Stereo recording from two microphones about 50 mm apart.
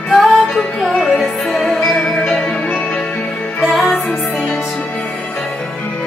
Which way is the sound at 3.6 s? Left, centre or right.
Centre.